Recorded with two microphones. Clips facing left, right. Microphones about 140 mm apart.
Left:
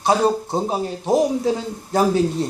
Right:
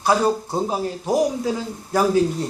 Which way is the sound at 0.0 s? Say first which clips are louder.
Left 1 dB; 20° left (ahead or behind).